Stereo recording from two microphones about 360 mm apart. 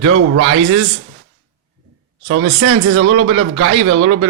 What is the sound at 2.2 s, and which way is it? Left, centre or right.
Speech, right.